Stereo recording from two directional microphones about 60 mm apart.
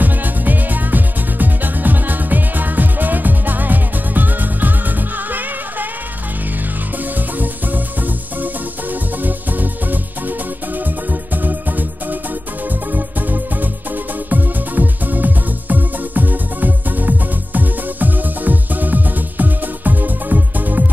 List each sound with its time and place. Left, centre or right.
0.0 s music: right
9.2 s music: right
12.9 s music: right